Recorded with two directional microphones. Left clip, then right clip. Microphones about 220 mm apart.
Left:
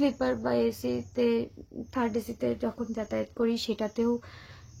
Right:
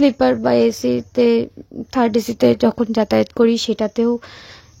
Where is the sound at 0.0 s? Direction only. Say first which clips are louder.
Right 13 dB; 35° right (ahead or behind).